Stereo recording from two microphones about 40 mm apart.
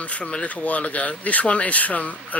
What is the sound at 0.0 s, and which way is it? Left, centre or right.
Speech, left.